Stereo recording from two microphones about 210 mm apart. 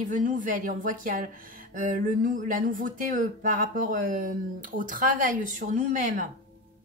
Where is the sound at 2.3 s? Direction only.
40° right (ahead or behind).